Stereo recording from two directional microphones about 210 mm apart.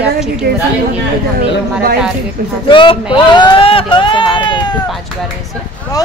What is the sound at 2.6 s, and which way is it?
Speech, 25° left (ahead or behind).